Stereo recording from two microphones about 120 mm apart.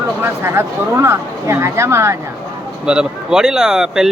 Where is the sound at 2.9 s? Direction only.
5° right (ahead or behind).